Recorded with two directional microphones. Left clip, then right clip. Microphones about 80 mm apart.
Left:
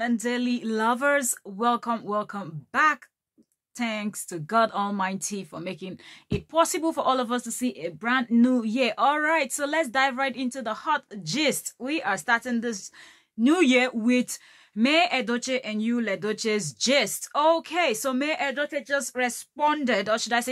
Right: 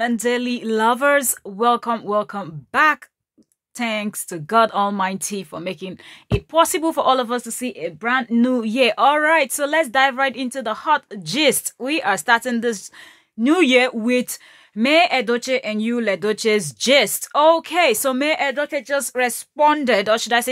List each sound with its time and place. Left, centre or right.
0.0 s speech: right
2.7 s speech: right
13.4 s speech: right